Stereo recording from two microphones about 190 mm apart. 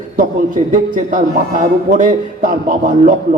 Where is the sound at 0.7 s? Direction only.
40° right (ahead or behind).